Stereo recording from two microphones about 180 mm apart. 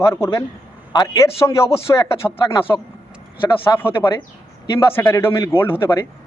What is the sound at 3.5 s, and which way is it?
Speech, 25° left (ahead or behind).